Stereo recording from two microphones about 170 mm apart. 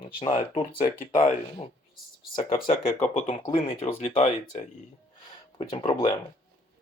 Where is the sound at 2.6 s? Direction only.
35° left (ahead or behind).